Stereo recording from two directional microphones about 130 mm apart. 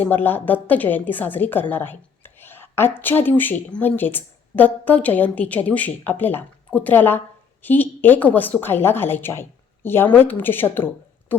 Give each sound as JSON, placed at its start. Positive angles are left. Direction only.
{"t": 0.0, "sound": "a woman's voice", "side_deg": 15}